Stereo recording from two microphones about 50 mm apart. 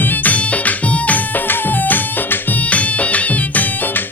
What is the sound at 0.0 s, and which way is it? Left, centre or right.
Music, left.